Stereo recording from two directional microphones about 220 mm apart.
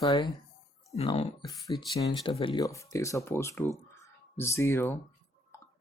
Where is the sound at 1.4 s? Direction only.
15° left (ahead or behind).